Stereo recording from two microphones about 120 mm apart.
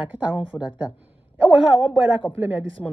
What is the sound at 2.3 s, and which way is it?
Speech, 15° left (ahead or behind).